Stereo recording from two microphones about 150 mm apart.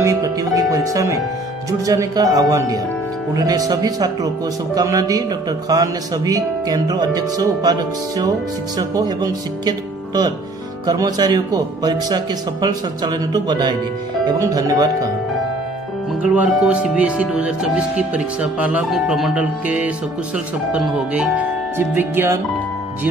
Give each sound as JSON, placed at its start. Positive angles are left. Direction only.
{"t": 0.0, "sound": "speech", "side_deg": -25}
{"t": 8.7, "sound": "speech", "side_deg": -25}
{"t": 16.2, "sound": "speech", "side_deg": -5}